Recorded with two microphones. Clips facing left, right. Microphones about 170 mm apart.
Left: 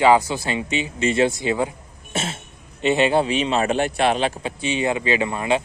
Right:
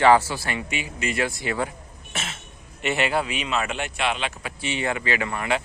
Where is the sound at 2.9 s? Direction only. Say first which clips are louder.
Left 6 dB; 20° left (ahead or behind); by 4.3 s 40° left (ahead or behind).